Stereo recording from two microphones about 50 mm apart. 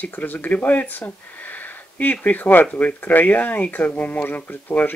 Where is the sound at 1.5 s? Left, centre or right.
Left.